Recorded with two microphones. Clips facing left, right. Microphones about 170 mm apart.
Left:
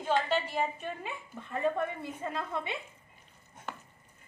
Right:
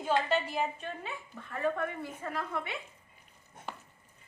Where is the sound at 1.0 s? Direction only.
20° left (ahead or behind).